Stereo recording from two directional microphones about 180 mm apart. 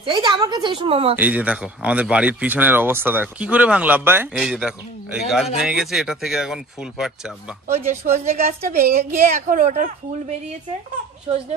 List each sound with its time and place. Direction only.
0.0 s a woman's voice: 25° right (ahead or behind)
1.1 s speech: 10° right (ahead or behind)
7.7 s a woman's voice: 35° right (ahead or behind)